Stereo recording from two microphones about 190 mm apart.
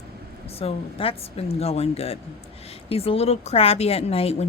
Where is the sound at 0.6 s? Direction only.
30° left (ahead or behind).